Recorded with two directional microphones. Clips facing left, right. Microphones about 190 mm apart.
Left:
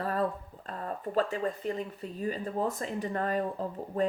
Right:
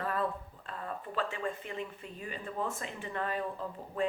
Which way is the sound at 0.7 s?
40° left (ahead or behind).